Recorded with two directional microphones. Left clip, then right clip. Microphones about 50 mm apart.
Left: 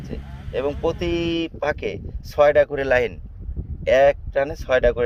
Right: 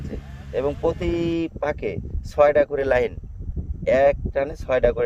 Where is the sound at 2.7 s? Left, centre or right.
Right.